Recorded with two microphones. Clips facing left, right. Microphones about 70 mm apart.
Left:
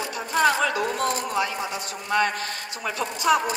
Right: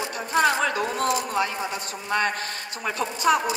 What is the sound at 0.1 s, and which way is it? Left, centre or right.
A man's voice, right.